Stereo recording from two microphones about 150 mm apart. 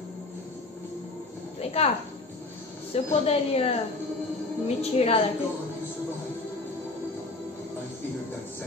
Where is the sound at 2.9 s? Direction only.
40° left (ahead or behind).